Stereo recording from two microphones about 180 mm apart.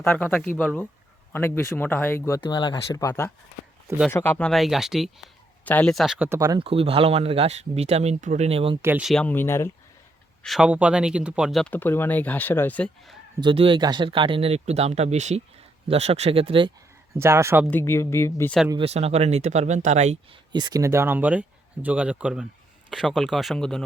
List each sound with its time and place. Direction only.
0.0 s speech: 10° left (ahead or behind)
2.4 s speech: 25° left (ahead or behind); by 6.7 s 20° right (ahead or behind)
6.7 s speech: 30° right (ahead or behind)
8.8 s speech: 10° right (ahead or behind); by 9.7 s 15° left (ahead or behind)
10.4 s speech: centre (ahead or behind)
13.4 s speech: 30° right (ahead or behind)
17.2 s speech: 15° right (ahead or behind)
17.7 s speech: 15° left (ahead or behind)
18.7 s speech: 30° right (ahead or behind)
20.5 s speech: 25° right (ahead or behind); by 23.8 s 5° left (ahead or behind)